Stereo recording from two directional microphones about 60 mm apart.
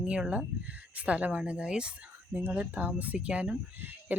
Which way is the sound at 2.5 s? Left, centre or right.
Right.